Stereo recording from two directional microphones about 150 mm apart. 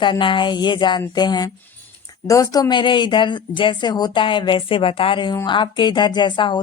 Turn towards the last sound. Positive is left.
turn(degrees=30)  # may be behind; listen again after turning